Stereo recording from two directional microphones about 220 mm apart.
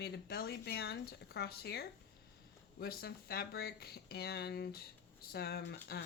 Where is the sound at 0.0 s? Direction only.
45° left (ahead or behind).